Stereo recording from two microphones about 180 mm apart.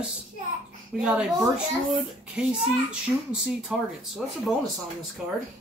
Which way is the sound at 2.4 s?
5° right (ahead or behind).